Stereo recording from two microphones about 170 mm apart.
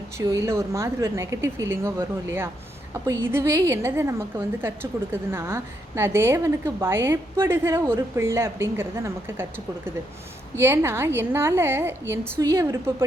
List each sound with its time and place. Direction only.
0.2 s a woman's voice: 15° right (ahead or behind)